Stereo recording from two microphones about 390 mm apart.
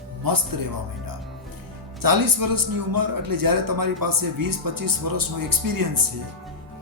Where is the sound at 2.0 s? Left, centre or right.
Right.